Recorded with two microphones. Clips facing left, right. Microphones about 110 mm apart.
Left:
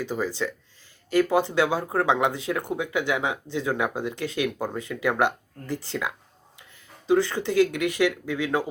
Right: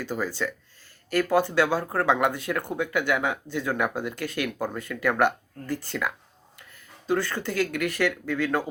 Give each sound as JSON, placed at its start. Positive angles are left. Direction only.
{"t": 0.0, "sound": "speech", "side_deg": 15}